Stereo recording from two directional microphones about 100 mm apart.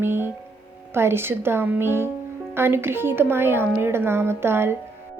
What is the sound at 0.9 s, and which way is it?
Speech, 25° right (ahead or behind).